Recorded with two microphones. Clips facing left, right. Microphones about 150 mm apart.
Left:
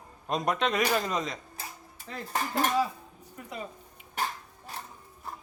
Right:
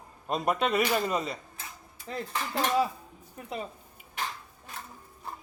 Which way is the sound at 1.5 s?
40° left (ahead or behind).